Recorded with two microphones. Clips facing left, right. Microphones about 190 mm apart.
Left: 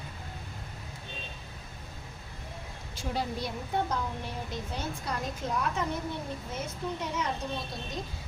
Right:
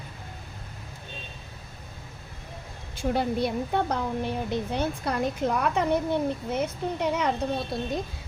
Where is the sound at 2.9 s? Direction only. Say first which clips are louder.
Right 8 dB; 55° right (ahead or behind).